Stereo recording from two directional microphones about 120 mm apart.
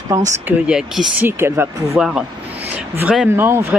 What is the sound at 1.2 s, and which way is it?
Speech, 20° right (ahead or behind).